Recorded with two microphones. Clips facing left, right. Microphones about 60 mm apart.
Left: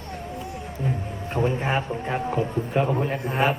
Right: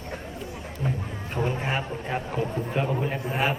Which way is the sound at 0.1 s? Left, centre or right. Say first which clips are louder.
Left 3 dB; left.